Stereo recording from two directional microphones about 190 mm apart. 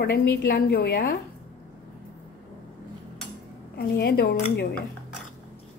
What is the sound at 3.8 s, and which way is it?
Speech, 55° left (ahead or behind).